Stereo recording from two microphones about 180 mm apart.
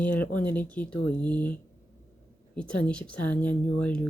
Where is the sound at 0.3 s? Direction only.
10° left (ahead or behind).